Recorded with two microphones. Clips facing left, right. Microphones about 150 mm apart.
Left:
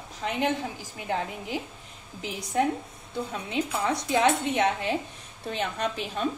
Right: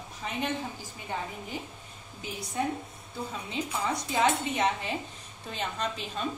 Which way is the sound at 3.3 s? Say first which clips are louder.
Left 4 dB; 70° left (ahead or behind).